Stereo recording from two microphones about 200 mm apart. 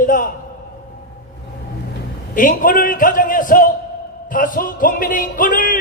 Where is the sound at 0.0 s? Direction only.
45° left (ahead or behind).